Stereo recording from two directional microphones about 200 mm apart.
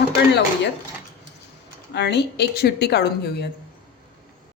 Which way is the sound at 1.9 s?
55° left (ahead or behind).